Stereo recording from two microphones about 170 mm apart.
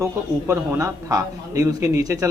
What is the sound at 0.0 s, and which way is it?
A man's voice, 15° right (ahead or behind).